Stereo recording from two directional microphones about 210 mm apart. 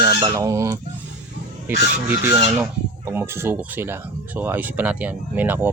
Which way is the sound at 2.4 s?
10° right (ahead or behind).